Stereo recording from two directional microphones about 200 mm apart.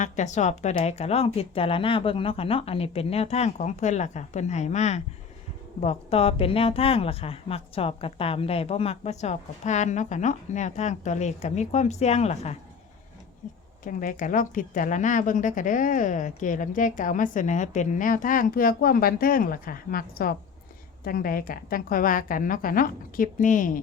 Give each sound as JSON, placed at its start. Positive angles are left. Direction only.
{"t": 0.0, "sound": "a woman's voice", "side_deg": 35}
{"t": 13.8, "sound": "a woman's voice", "side_deg": 40}